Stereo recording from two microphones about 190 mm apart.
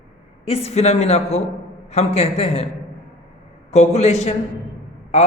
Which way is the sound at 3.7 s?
35° left (ahead or behind).